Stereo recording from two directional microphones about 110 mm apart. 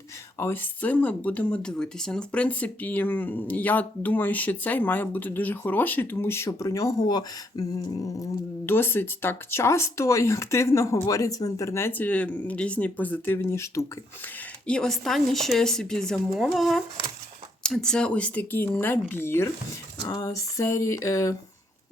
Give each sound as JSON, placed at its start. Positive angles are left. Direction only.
{"t": 0.3, "sound": "speech", "side_deg": 20}
{"t": 8.6, "sound": "speech", "side_deg": 20}
{"t": 14.7, "sound": "speech", "side_deg": 5}
{"t": 20.1, "sound": "speech", "side_deg": 30}